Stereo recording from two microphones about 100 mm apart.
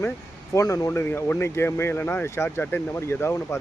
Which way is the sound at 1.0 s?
20° left (ahead or behind).